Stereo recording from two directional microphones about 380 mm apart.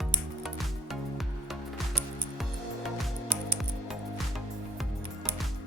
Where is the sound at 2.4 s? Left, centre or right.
Centre.